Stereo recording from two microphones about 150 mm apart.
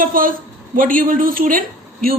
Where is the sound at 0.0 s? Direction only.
70° right (ahead or behind).